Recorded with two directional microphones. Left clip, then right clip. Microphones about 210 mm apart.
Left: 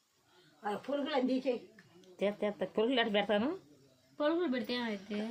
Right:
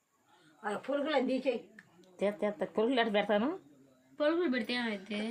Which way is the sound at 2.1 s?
10° left (ahead or behind).